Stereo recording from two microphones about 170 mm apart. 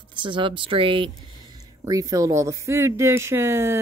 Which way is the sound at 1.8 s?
20° right (ahead or behind).